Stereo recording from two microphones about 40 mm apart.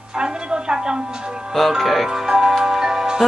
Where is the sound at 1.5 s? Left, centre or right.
Centre.